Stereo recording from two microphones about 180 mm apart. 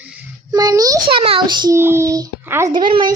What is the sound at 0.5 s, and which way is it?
A child's voice, 20° right (ahead or behind).